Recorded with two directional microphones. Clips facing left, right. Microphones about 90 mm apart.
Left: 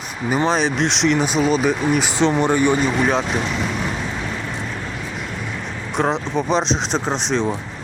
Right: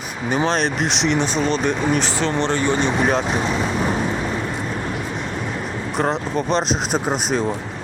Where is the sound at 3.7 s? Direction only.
35° right (ahead or behind).